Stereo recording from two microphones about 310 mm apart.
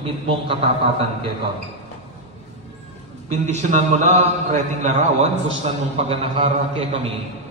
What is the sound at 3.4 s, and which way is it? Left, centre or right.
A man's voice, right.